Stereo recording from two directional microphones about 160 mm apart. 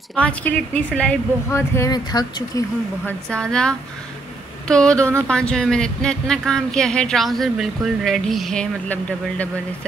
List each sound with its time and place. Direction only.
0.1 s speech: 10° left (ahead or behind); by 2.6 s 25° left (ahead or behind)
3.1 s speech: 5° left (ahead or behind)